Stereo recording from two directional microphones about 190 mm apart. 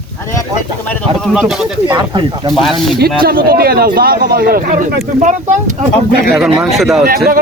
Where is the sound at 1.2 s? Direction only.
Centre (ahead or behind).